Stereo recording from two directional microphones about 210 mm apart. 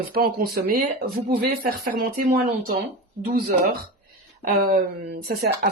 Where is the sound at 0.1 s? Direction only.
45° right (ahead or behind).